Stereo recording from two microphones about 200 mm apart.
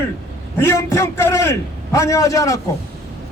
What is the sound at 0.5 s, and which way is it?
A man's voice, 10° left (ahead or behind).